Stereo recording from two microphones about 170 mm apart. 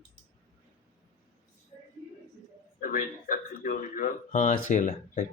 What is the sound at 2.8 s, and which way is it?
Speech, 55° left (ahead or behind).